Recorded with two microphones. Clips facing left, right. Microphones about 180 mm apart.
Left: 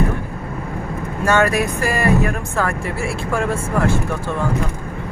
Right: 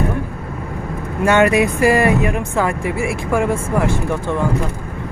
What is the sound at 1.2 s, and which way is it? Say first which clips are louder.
Speech: right 4 dB; 15° right (ahead or behind).